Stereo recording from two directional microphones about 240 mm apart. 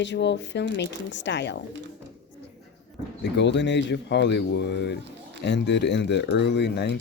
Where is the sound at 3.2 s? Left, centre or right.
Left.